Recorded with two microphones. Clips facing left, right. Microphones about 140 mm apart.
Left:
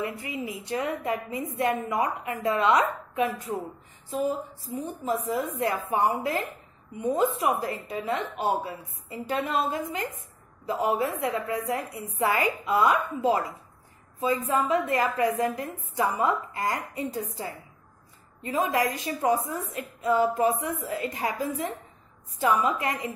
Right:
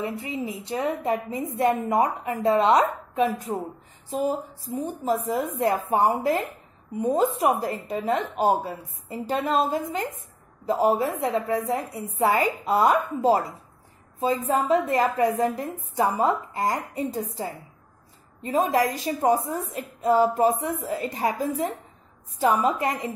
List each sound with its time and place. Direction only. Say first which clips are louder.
0.0 s a woman's voice: right 3 dB; 25° right (ahead or behind)
18.4 s a woman's voice: right 3 dB; 35° right (ahead or behind)